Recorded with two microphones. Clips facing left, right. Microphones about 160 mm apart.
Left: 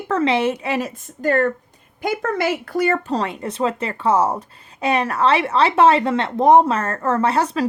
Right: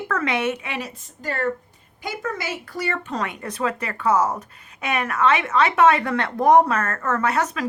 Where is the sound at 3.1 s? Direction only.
30° left (ahead or behind).